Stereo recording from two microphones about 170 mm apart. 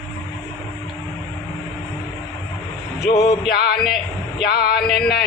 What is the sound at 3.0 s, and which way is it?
Speech, 70° left (ahead or behind).